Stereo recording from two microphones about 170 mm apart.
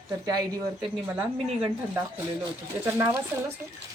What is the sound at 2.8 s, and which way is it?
Speech, 15° right (ahead or behind).